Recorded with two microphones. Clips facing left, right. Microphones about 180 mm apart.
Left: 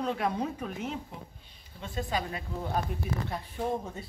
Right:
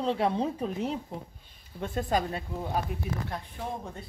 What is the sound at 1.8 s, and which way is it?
Speech, 50° right (ahead or behind).